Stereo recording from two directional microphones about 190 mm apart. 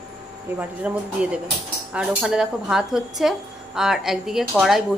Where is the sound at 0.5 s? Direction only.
10° right (ahead or behind).